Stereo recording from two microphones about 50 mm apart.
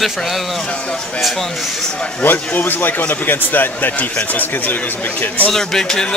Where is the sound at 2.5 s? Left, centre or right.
Left.